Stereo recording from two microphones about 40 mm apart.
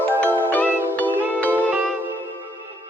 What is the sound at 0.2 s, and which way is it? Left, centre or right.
Music, left.